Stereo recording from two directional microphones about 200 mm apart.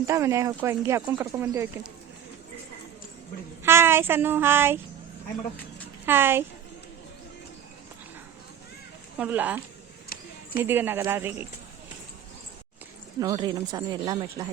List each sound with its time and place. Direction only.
0.0 s speech: 15° right (ahead or behind)
3.6 s speech: 10° right (ahead or behind)
6.1 s speech: 10° right (ahead or behind)
9.1 s speech: 10° right (ahead or behind)
10.1 s a sound: 50° left (ahead or behind)
10.6 s speech: 10° right (ahead or behind)
13.1 s speech: 20° right (ahead or behind)